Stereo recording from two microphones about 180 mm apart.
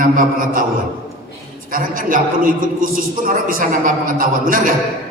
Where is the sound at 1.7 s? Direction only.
50° right (ahead or behind).